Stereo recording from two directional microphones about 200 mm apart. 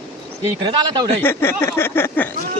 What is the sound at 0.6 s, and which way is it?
Speech, 20° right (ahead or behind).